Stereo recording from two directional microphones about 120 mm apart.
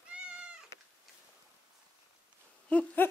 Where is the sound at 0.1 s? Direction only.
10° right (ahead or behind).